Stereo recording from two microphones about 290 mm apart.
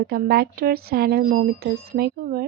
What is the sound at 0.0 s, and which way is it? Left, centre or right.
Speech, right.